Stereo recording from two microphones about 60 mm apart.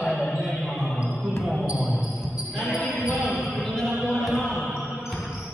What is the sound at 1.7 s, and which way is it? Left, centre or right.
Basketball bounce, right.